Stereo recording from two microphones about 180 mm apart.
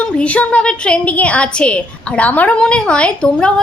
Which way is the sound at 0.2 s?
5° left (ahead or behind).